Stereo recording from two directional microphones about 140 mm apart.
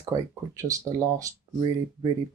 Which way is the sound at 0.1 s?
25° right (ahead or behind).